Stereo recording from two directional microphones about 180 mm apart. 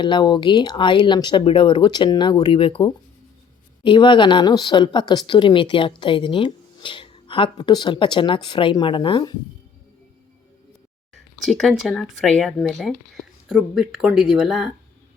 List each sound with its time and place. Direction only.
0.0 s speech: 25° left (ahead or behind)
11.1 s speech: centre (ahead or behind)